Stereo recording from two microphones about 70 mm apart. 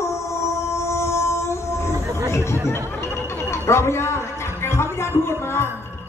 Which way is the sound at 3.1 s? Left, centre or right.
Left.